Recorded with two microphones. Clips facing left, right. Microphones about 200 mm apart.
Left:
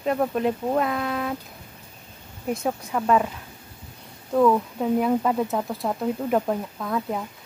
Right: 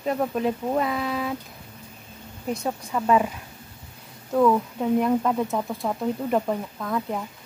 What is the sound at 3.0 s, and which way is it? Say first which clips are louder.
Speech: even; 5° right (ahead or behind).